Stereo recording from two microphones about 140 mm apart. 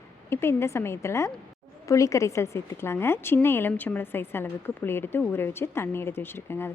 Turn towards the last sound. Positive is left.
turn(degrees=15)  # may be behind; listen again after turning